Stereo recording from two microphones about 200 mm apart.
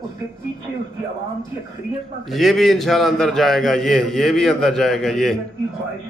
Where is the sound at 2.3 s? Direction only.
Centre (ahead or behind).